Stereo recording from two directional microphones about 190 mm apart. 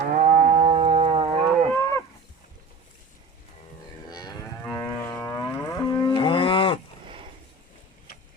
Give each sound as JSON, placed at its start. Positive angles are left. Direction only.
{"t": 0.0, "sound": "livestock", "side_deg": -40}
{"t": 1.7, "sound": "moo", "side_deg": 15}
{"t": 4.1, "sound": "livestock", "side_deg": 15}